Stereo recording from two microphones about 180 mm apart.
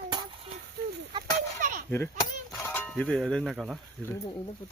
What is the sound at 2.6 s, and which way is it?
Speech, 5° left (ahead or behind).